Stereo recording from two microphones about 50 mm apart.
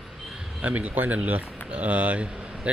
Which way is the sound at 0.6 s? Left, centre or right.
Right.